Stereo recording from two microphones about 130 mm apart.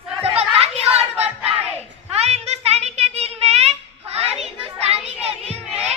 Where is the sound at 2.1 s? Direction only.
55° right (ahead or behind).